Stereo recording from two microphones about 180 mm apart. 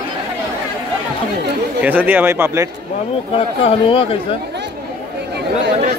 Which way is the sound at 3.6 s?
30° left (ahead or behind).